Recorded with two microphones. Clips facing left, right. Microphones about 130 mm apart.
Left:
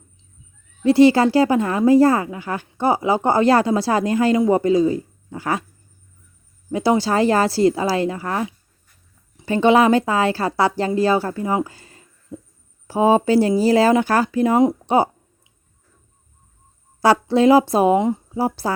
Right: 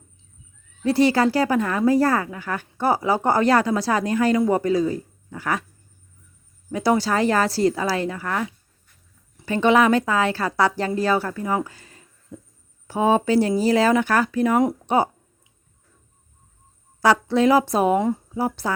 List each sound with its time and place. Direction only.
0.8 s speech: 25° left (ahead or behind)
6.7 s speech: 25° left (ahead or behind)
17.0 s speech: 30° left (ahead or behind)
17.9 s speech: 20° left (ahead or behind)
18.3 s speech: 30° left (ahead or behind)